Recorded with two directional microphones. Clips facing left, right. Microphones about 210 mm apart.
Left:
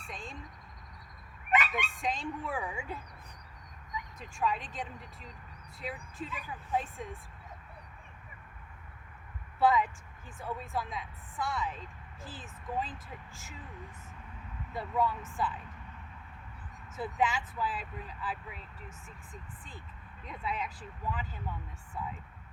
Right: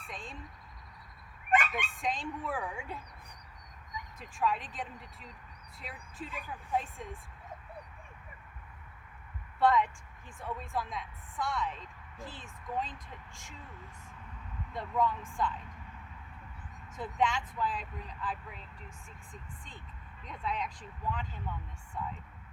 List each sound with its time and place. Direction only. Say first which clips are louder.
0.1 s a sound: left 1 dB; centre (ahead or behind)
1.5 s a sound: right 1 dB; 50° right (ahead or behind)
2.0 s a woman's voice: right 1 dB; centre (ahead or behind)
4.2 s a woman's voice: right 1 dB; centre (ahead or behind)
9.6 s a woman's voice: even; 5° left (ahead or behind)
14.7 s a woman's voice: even; 5° left (ahead or behind)
16.9 s a woman's voice: even; 5° left (ahead or behind)